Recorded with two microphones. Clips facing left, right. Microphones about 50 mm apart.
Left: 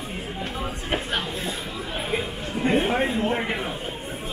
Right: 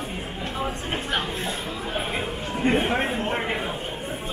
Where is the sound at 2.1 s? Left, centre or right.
Right.